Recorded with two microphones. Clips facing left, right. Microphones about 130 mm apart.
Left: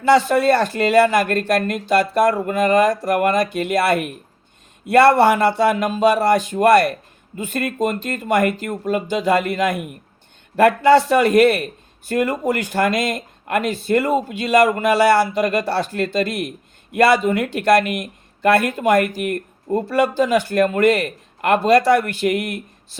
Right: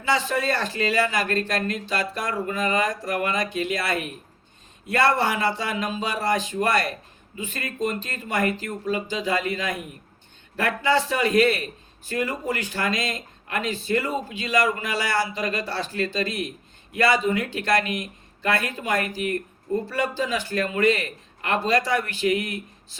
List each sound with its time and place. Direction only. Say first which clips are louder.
0.1 s a man's voice: left 10 dB; 55° left (ahead or behind)